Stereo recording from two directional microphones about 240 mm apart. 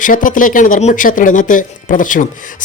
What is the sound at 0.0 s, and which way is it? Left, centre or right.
Speech, left.